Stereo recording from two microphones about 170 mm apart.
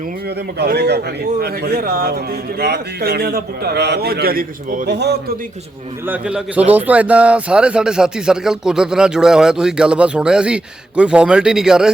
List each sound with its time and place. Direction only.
0.6 s a man's voice: 75° right (ahead or behind)
6.1 s speech: 5° right (ahead or behind)